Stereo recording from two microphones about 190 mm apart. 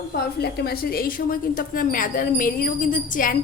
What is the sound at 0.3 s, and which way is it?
A woman's voice, 55° left (ahead or behind).